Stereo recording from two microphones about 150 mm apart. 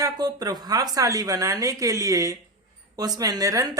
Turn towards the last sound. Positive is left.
turn(degrees=-25)  # may be behind; listen again after turning